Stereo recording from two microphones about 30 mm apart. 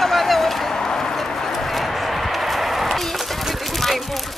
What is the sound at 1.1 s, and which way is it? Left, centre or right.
Clip-clop, centre.